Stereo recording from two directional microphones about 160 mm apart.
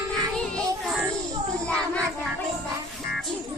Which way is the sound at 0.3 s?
5° left (ahead or behind).